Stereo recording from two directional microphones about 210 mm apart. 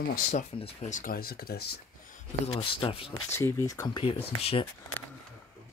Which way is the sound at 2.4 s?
30° left (ahead or behind).